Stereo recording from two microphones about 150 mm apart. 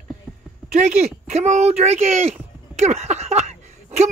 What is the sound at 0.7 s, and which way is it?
Speech, 50° right (ahead or behind).